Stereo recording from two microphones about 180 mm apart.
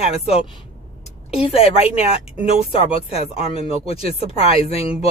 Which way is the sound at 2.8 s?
30° left (ahead or behind).